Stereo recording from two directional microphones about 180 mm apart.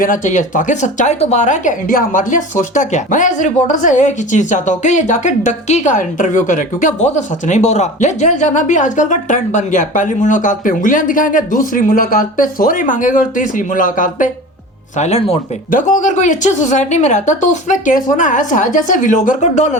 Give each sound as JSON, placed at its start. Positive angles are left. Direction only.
{"t": 0.0, "sound": "speech", "side_deg": 45}
{"t": 14.9, "sound": "speech", "side_deg": 35}